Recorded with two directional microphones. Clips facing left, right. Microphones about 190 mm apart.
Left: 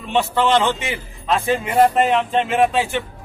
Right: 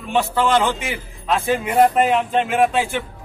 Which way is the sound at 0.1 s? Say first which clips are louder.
Left 1 dB; 5° right (ahead or behind).